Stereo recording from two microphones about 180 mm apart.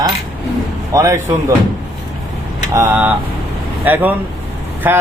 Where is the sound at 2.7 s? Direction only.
10° right (ahead or behind).